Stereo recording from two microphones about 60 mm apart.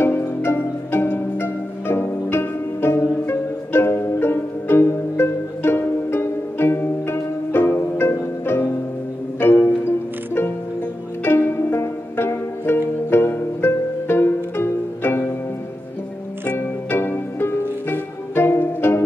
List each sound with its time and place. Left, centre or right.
0.0 s music: left
16.5 s music: left